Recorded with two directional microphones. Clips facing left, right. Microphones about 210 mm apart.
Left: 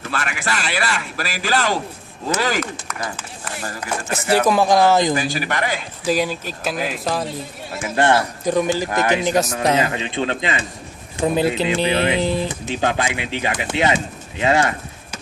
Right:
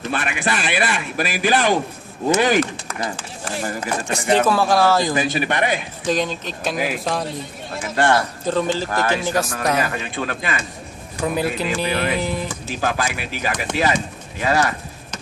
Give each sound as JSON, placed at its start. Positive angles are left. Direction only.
{"t": 0.1, "sound": "a man's voice", "side_deg": -20}
{"t": 4.4, "sound": "speech", "side_deg": 15}
{"t": 5.1, "sound": "a man's voice", "side_deg": -20}
{"t": 6.1, "sound": "speech", "side_deg": 10}
{"t": 7.9, "sound": "a man's voice", "side_deg": 20}